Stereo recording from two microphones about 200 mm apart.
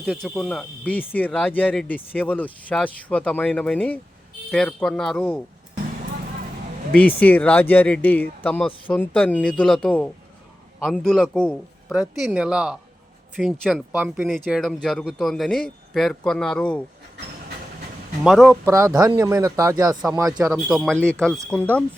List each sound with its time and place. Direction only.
0.0 s speech: 5° right (ahead or behind)
6.9 s speech: 5° left (ahead or behind)
18.2 s speech: 5° right (ahead or behind)
18.6 s speech: 15° right (ahead or behind)
20.7 s speech: centre (ahead or behind)